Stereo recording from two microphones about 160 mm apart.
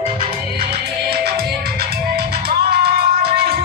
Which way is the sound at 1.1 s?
80° right.